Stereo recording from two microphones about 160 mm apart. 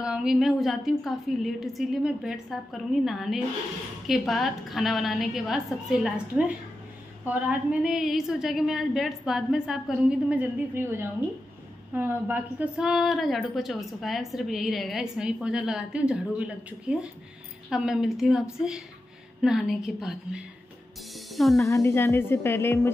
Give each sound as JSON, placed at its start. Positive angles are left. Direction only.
{"t": 0.0, "sound": "a woman's voice", "side_deg": -5}
{"t": 21.1, "sound": "music", "side_deg": 0}
{"t": 21.6, "sound": "speech", "side_deg": 15}